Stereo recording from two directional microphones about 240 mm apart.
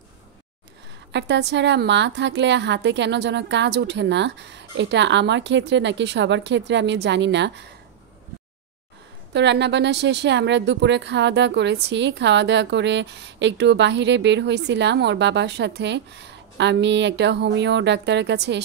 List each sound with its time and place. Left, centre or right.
1.1 s speech: right
9.3 s speech: right